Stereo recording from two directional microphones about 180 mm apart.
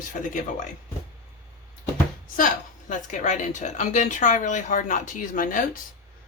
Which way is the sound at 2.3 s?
45° left (ahead or behind).